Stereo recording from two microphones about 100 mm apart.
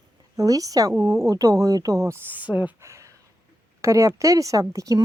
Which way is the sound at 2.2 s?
15° right (ahead or behind).